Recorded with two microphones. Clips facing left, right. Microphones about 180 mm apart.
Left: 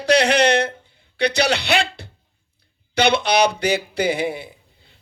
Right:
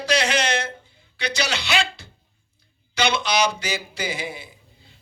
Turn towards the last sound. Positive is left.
turn(degrees=60)  # may be behind; listen again after turning